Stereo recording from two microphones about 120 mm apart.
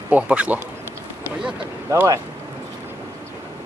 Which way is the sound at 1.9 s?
25° right (ahead or behind).